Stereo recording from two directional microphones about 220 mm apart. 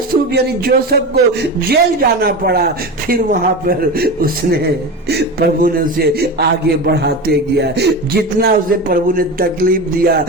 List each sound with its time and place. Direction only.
0.3 s a man's voice: 45° right (ahead or behind)